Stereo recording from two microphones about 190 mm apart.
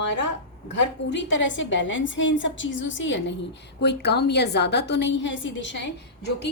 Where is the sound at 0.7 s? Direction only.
70° left (ahead or behind).